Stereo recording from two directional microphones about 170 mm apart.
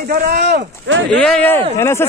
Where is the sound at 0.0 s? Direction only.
60° right (ahead or behind); by 1.2 s 85° right.